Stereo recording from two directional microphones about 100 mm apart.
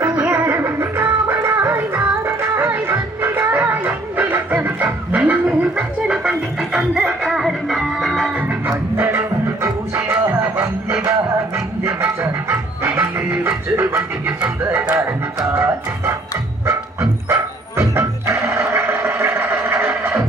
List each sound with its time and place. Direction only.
0.0 s music: 20° right (ahead or behind); by 8.3 s centre (ahead or behind)
8.4 s music: 15° right (ahead or behind)
16.6 s dog: 25° right (ahead or behind)
17.7 s music: 25° right (ahead or behind)